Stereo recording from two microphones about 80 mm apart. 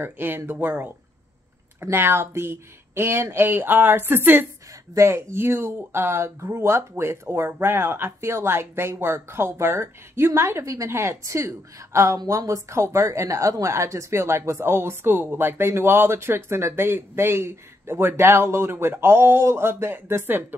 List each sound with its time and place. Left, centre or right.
0.0 s speech: right